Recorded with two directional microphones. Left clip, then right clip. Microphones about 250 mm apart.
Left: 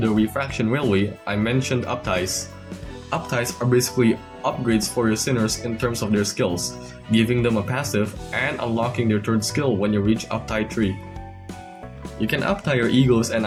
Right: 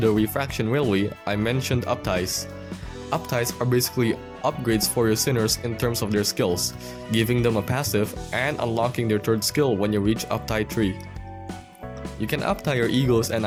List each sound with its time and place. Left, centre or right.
0.0 s speech: right
12.2 s speech: right